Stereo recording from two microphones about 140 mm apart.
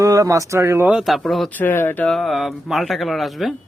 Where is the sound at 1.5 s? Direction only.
15° left (ahead or behind).